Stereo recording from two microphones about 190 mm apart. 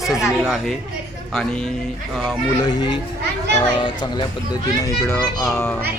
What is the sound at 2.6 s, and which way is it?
A child's voice, 20° left (ahead or behind).